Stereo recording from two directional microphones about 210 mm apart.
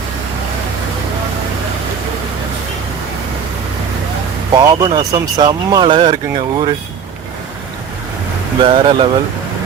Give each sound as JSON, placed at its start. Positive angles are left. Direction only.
{"t": 4.5, "sound": "speech", "side_deg": -20}
{"t": 8.6, "sound": "speech", "side_deg": -25}